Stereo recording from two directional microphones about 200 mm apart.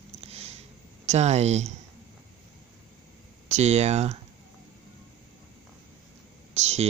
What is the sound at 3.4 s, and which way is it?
Speech, 35° right (ahead or behind).